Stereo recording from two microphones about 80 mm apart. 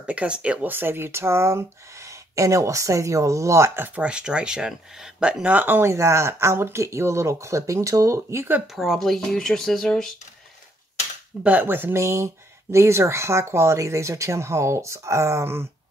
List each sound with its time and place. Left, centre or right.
0.0 s speech: centre; by 3.9 s right
3.9 s speech: centre
5.9 s speech: right
8.7 s speech: centre
11.4 s speech: right